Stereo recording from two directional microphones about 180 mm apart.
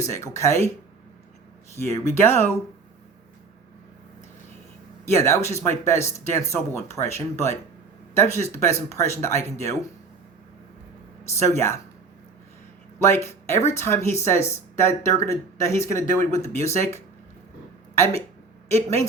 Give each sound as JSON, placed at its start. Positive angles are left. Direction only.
{"t": 0.0, "sound": "speech", "side_deg": 15}
{"t": 1.7, "sound": "speech", "side_deg": 15}
{"t": 5.0, "sound": "speech", "side_deg": 15}
{"t": 13.0, "sound": "speech", "side_deg": 15}